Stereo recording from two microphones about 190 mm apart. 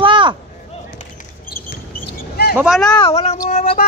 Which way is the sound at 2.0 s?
55° left (ahead or behind).